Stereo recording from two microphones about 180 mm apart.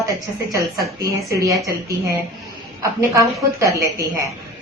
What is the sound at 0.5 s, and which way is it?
A woman's voice, 20° right (ahead or behind).